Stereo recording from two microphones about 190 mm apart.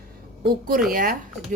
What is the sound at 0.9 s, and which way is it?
Speech, 50° right (ahead or behind).